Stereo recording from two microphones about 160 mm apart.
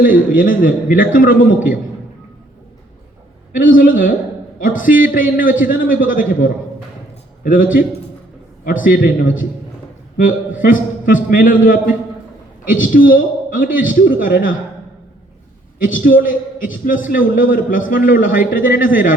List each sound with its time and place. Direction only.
0.0 s a man's voice: 60° left (ahead or behind)
3.5 s a man's voice: 60° left (ahead or behind)
15.8 s a man's voice: 60° left (ahead or behind)